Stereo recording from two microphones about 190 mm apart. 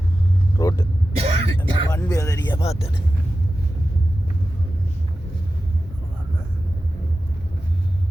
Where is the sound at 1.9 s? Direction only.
20° left (ahead or behind).